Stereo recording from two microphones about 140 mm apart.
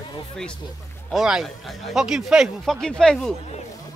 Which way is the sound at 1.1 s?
5° right (ahead or behind).